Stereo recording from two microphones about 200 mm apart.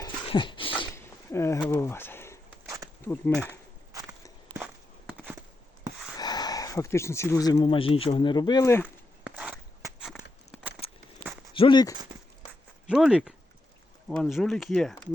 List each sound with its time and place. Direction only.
0.0 s dog: 25° left (ahead or behind)
0.9 s a sound: 15° left (ahead or behind)
2.6 s a sound: 15° right (ahead or behind)
3.0 s speech: 10° left (ahead or behind)
6.1 s speech: 20° left (ahead or behind)
9.2 s walk: 5° right (ahead or behind)
10.5 s a sound: 5° right (ahead or behind)
11.5 s speech: 25° left (ahead or behind)
12.9 s speech: 5° right (ahead or behind)